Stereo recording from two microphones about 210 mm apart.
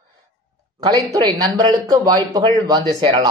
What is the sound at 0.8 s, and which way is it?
Speech, 20° right (ahead or behind).